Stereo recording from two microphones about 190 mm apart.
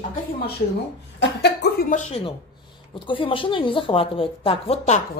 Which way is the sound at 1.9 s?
35° left (ahead or behind).